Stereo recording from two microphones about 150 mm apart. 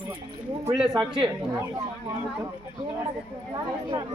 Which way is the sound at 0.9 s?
30° right (ahead or behind).